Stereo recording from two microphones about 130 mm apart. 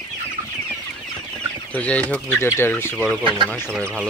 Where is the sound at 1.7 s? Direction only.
10° left (ahead or behind).